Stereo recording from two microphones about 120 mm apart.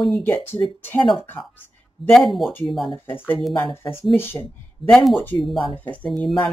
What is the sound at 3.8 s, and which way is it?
Speech, 20° left (ahead or behind).